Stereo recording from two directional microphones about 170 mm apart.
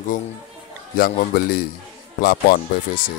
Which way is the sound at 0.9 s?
60° left (ahead or behind).